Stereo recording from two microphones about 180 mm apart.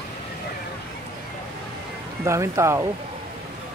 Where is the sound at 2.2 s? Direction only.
15° right (ahead or behind).